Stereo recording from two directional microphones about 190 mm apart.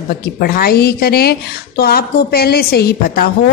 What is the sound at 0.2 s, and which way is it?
A woman's voice, 50° left (ahead or behind).